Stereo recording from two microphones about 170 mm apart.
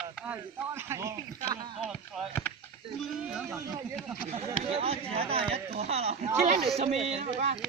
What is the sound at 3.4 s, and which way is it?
Speech, 15° right (ahead or behind).